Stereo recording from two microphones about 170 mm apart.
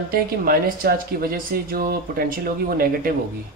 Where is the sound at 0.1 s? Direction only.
60° right (ahead or behind).